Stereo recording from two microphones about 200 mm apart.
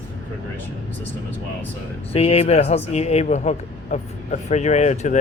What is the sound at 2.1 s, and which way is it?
A man's voice, 30° left (ahead or behind).